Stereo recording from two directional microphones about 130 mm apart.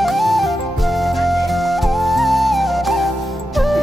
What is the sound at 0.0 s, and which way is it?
Flute, centre (ahead or behind).